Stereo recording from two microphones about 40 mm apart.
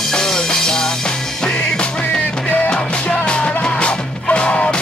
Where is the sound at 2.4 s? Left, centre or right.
Left.